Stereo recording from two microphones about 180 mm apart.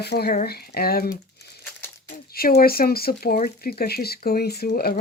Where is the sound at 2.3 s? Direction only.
55° left (ahead or behind).